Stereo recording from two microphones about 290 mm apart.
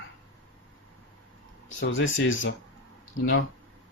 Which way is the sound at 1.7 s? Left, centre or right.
Left.